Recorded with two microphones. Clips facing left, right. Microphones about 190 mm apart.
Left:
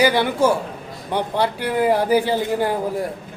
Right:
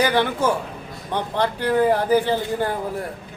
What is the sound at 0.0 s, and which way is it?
A man's voice, 10° left (ahead or behind).